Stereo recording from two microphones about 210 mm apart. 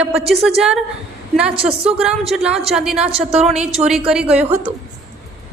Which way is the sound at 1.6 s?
30° right (ahead or behind).